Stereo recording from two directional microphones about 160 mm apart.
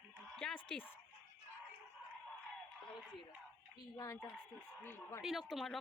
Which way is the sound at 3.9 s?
25° left (ahead or behind).